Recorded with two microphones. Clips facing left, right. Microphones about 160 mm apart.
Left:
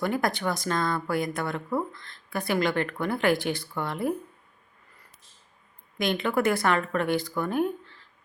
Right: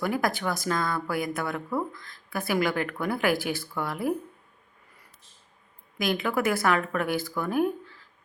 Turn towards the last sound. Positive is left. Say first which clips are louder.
# right 1 dB
turn(degrees=-5)  # may be behind; listen again after turning